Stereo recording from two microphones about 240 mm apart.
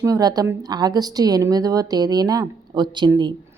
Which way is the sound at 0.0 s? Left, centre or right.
Centre.